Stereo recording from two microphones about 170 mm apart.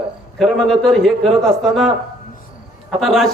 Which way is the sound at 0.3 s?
Centre (ahead or behind).